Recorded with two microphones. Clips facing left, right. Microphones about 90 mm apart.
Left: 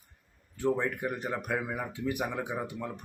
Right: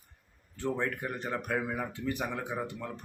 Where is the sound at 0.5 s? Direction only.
10° left (ahead or behind).